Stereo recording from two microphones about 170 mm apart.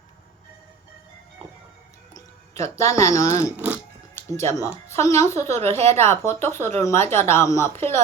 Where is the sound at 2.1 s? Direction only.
15° left (ahead or behind).